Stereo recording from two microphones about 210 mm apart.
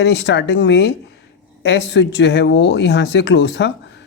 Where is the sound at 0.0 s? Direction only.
55° left (ahead or behind).